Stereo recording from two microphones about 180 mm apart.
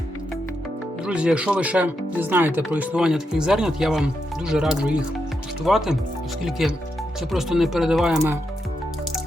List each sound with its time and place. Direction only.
1.0 s speech: 5° right (ahead or behind)